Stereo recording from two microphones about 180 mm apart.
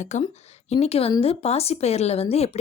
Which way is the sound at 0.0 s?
40° left (ahead or behind).